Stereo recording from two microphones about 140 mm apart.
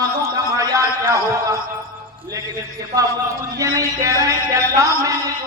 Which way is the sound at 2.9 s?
25° right (ahead or behind).